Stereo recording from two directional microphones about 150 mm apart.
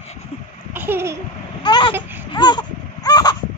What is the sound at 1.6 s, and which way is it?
Babbling, 30° left (ahead or behind).